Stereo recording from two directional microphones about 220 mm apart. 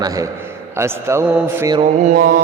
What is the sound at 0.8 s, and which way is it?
A man's voice, 10° right (ahead or behind).